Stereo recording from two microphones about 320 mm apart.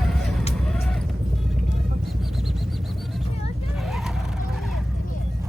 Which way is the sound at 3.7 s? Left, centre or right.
Centre.